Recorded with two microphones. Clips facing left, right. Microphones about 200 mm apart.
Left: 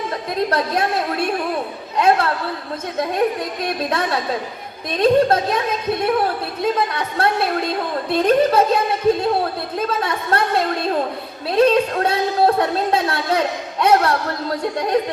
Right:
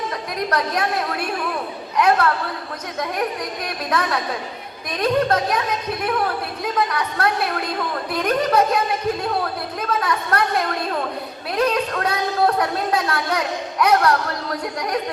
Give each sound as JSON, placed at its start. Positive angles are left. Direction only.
{"t": 0.3, "sound": "a woman's voice", "side_deg": 25}